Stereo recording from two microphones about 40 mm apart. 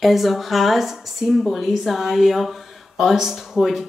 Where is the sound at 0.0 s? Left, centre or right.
Centre.